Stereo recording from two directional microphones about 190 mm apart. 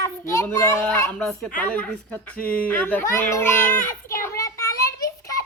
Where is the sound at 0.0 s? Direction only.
15° left (ahead or behind).